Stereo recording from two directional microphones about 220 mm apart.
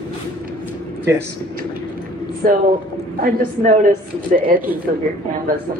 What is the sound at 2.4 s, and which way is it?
Speech, 40° right (ahead or behind).